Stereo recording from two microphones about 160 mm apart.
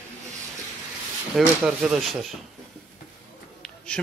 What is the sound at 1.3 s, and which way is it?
A man's voice, 5° right (ahead or behind).